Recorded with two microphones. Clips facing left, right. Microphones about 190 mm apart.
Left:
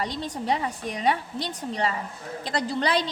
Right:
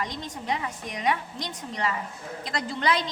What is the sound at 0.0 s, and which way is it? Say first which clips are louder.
A woman's voice: left 4 dB; 35° left (ahead or behind).